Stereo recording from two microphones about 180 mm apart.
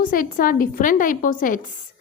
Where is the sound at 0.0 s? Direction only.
50° left (ahead or behind).